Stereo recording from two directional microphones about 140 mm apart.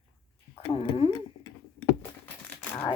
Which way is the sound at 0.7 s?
45° left (ahead or behind).